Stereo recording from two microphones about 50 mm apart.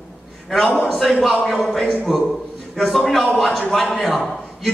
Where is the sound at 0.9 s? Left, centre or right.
Centre.